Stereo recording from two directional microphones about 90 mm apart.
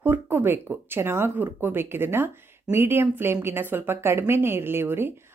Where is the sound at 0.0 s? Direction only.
25° right (ahead or behind).